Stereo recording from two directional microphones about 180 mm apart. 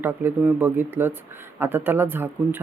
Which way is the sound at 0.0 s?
10° right (ahead or behind).